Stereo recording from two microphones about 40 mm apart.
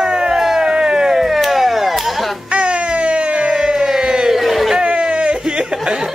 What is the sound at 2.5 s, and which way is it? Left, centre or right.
Baby cry, right.